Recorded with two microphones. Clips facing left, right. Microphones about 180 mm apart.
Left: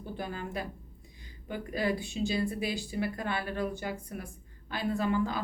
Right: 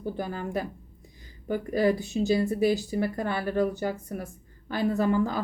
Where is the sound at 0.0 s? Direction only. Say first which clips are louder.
Right 6 dB; 45° right (ahead or behind).